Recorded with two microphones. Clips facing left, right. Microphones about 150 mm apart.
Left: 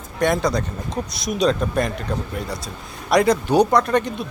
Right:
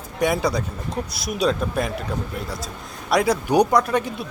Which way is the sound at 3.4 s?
15° right (ahead or behind).